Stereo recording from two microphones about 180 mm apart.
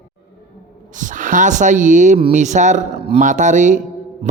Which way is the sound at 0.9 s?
45° right (ahead or behind).